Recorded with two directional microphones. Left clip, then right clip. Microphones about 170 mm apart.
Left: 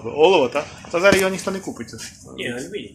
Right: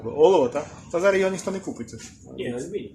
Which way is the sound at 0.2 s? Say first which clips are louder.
Left 3 dB; 5° right (ahead or behind).